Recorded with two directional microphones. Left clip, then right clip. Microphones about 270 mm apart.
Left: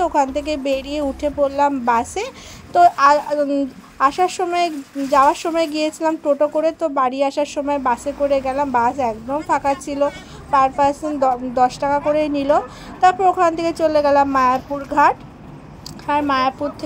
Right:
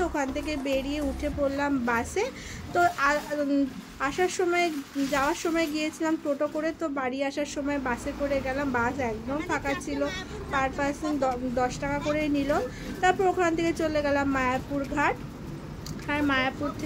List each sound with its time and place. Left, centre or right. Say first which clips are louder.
0.0 s a woman's voice: left 11 dB; centre